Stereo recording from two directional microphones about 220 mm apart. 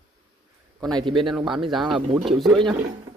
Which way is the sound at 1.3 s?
Centre (ahead or behind).